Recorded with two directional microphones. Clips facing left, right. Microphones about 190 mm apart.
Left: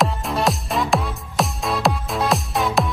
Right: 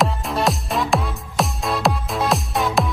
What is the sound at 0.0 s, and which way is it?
Music, centre (ahead or behind).